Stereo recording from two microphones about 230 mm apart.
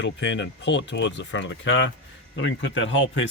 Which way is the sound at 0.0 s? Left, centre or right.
Left.